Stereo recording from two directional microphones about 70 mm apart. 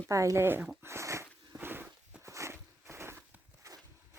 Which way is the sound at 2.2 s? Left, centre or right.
Right.